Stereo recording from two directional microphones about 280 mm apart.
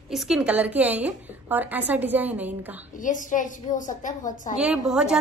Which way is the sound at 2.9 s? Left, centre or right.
Left.